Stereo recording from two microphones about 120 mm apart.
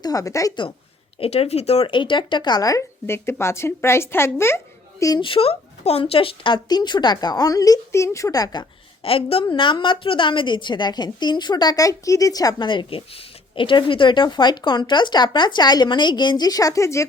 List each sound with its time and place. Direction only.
0.0 s a woman's voice: 30° left (ahead or behind)
1.2 s speech: 60° left (ahead or behind); by 5.2 s 25° left (ahead or behind)
5.2 s a woman's voice: 50° left (ahead or behind); by 8.6 s 30° left (ahead or behind)
9.0 s a woman's voice: 50° left (ahead or behind); by 17.1 s 25° left (ahead or behind)